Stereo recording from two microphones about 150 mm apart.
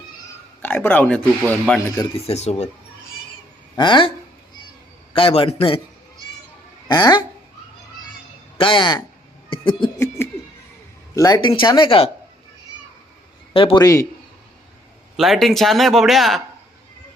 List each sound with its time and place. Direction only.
0.6 s speech: 15° left (ahead or behind)
2.1 s speech: 45° left (ahead or behind)
3.8 s a man's voice: 30° left (ahead or behind)
5.1 s a man's voice: 35° left (ahead or behind)
6.8 s speech: 25° left (ahead or behind)
8.5 s speech: 35° left (ahead or behind)
9.5 s a sound: 35° left (ahead or behind)
10.2 s a sound: 15° left (ahead or behind)
11.1 s a man's voice: 25° left (ahead or behind)
13.5 s a man's voice: 35° left (ahead or behind)
13.8 s a man's voice: 20° left (ahead or behind)
15.1 s speech: centre (ahead or behind)